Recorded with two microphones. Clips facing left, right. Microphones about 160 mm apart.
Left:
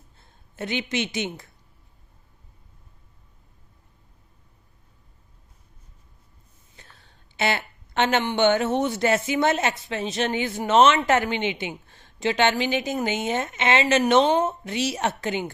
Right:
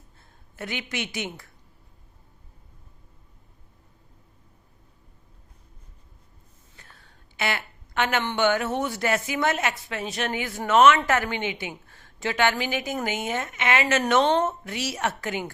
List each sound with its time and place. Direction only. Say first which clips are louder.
0.5 s a woman's voice: left 5 dB; 25° left (ahead or behind)
7.3 s a sound: left 4 dB; 25° left (ahead or behind)
8.4 s a woman's voice: left 3 dB; 25° left (ahead or behind)
14.3 s a woman's voice: left 1 dB; 15° left (ahead or behind)